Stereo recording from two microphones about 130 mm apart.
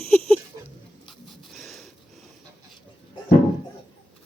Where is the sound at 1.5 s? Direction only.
Centre (ahead or behind).